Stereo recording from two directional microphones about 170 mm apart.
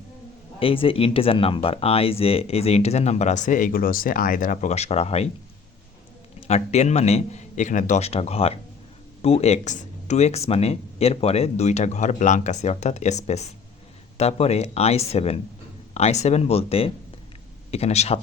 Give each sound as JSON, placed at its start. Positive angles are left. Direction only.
{"t": 0.6, "sound": "speech", "side_deg": 30}
{"t": 6.5, "sound": "speech", "side_deg": 40}